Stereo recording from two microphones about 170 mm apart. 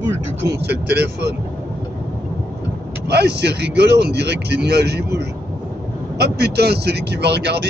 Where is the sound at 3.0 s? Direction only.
80° right.